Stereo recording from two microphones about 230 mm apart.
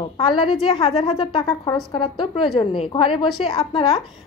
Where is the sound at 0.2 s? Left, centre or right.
Left.